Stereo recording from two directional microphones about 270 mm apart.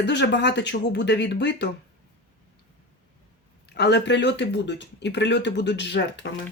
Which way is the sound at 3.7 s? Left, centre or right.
Left.